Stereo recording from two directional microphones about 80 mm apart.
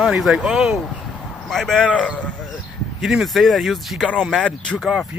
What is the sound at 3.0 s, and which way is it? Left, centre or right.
Speech, centre.